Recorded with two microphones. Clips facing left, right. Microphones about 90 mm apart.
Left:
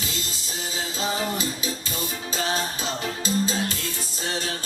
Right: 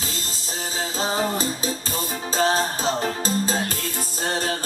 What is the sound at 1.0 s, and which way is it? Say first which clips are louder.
Music: right 3 dB; 35° right (ahead or behind).